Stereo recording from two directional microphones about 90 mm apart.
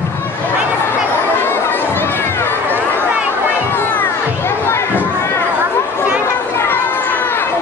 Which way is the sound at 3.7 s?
25° left (ahead or behind).